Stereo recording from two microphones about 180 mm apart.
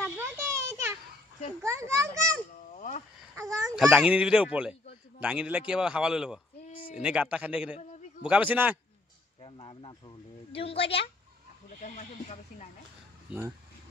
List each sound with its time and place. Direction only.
0.2 s a sound: 15° right (ahead or behind)
1.6 s speech: 15° right (ahead or behind)
2.7 s a sound: 45° left (ahead or behind)
3.3 s a child's voice: 20° right (ahead or behind)
3.7 s a man's voice: 5° right (ahead or behind)
6.6 s a sound: 50° left (ahead or behind)
6.9 s speech: 5° right (ahead or behind)
9.4 s speech: 30° left (ahead or behind)
11.8 s speech: 45° left (ahead or behind)